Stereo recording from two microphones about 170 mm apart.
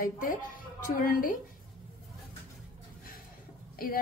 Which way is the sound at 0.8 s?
55° left (ahead or behind).